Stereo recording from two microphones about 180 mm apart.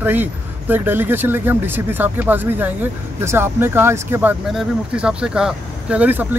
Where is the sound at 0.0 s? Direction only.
10° right (ahead or behind).